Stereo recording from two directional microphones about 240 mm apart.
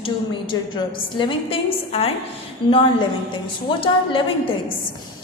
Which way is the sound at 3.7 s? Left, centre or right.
Left.